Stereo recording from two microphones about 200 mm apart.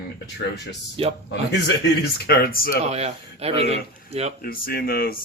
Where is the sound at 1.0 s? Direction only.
30° right (ahead or behind).